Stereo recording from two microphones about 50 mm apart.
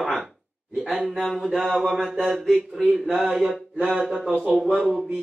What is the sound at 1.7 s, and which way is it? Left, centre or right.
Speech, centre.